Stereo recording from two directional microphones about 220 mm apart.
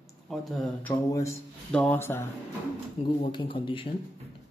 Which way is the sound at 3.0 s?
25° left (ahead or behind).